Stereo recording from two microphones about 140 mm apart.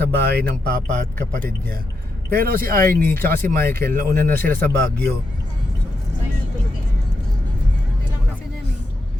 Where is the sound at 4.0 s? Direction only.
80° right.